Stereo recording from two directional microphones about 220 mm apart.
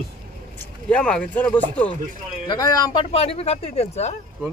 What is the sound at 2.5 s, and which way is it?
Speech, 15° left (ahead or behind).